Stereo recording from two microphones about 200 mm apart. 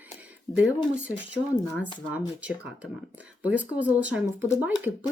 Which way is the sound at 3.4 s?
5° right (ahead or behind).